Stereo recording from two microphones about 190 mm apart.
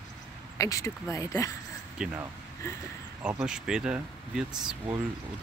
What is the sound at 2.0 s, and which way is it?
Speech, 5° right (ahead or behind).